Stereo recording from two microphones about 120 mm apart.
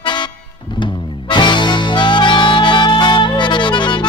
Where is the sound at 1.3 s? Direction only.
40° left (ahead or behind).